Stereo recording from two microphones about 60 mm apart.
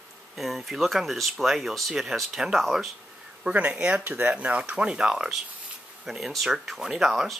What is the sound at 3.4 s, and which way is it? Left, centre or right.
Speech, right.